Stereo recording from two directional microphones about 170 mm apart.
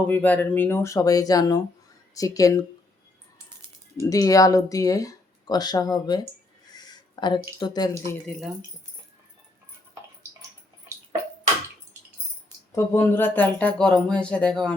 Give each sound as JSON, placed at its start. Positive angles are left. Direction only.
{"t": 0.1, "sound": "speech", "side_deg": 10}
{"t": 4.0, "sound": "speech", "side_deg": 20}
{"t": 8.1, "sound": "speech", "side_deg": 5}
{"t": 12.7, "sound": "speech", "side_deg": 15}